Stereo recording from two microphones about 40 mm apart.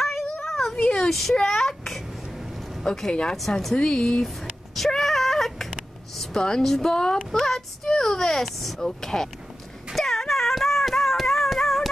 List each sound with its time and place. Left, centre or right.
0.0 s a sound: centre
0.7 s speech: centre
3.1 s speech: left
3.3 s speech: centre
3.7 s speech: centre
4.7 s a sound: centre
6.1 s speech: centre
9.0 s speech: centre
9.9 s music: centre